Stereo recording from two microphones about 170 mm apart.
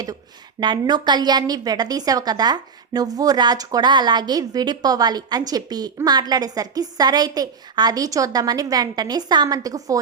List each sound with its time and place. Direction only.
0.6 s a woman's voice: 25° right (ahead or behind)